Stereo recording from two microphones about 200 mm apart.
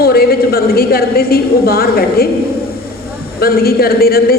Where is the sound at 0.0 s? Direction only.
50° left (ahead or behind).